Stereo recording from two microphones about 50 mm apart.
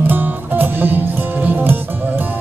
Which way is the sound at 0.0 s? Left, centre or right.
Right.